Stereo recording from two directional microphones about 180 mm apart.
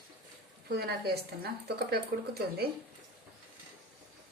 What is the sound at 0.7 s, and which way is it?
A woman's voice, 65° right (ahead or behind).